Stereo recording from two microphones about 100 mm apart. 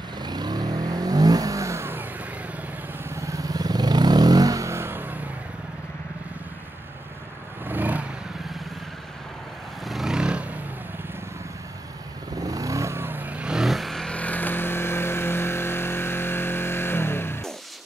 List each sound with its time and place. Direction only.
0.2 s vehicle: 45° right (ahead or behind); by 2.0 s 25° right (ahead or behind)
3.1 s vehicle: 30° right (ahead or behind)
7.6 s vehicle: 20° right (ahead or behind)
9.8 s vehicle: centre (ahead or behind)
12.4 s vehicle: 35° right (ahead or behind); by 17.4 s 25° left (ahead or behind)